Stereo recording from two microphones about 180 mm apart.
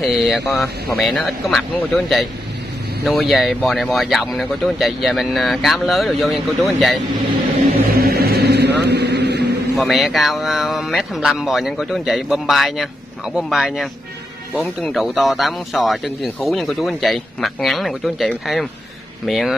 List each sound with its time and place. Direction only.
0.0 s speech: centre (ahead or behind)
7.9 s vehicle: 60° right (ahead or behind)
9.8 s speech: centre (ahead or behind)